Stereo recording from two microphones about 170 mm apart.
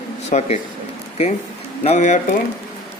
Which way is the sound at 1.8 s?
40° left (ahead or behind).